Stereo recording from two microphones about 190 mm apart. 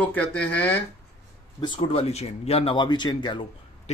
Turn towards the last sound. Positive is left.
turn(degrees=25)  # may be behind; listen again after turning